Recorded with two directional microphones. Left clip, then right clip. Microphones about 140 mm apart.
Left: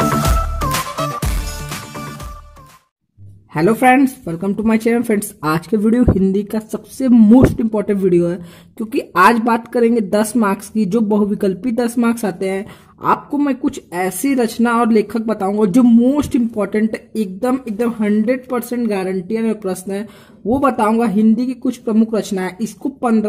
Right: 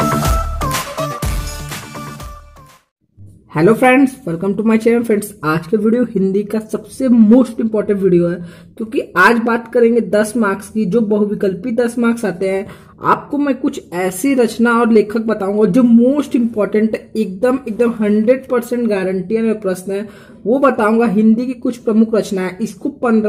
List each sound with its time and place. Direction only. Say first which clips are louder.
0.0 s music: even; centre (ahead or behind)
3.5 s speech: right 2 dB; 25° left (ahead or behind)